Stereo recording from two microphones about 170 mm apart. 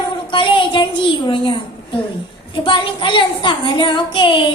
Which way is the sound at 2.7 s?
30° left (ahead or behind).